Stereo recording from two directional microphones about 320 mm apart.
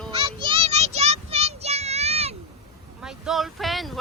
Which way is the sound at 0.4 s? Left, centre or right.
Centre.